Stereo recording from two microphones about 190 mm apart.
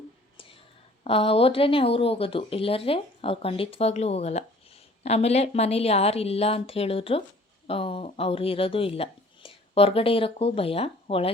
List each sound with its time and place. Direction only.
1.0 s speech: 30° left (ahead or behind)